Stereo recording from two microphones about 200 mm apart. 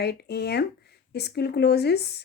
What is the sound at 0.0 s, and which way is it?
A woman's voice, 55° left (ahead or behind).